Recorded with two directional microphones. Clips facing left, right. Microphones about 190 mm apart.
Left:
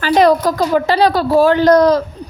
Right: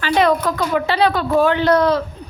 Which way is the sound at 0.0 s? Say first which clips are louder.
Left 5 dB; 40° left (ahead or behind).